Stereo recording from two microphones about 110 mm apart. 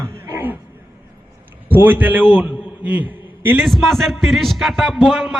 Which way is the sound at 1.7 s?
15° right (ahead or behind).